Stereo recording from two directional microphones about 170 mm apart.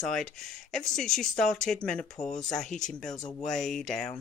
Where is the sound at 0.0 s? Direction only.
Centre (ahead or behind).